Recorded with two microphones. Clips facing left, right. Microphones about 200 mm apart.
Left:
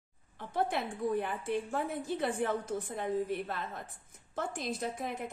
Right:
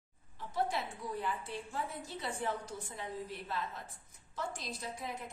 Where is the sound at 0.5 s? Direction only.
55° left (ahead or behind).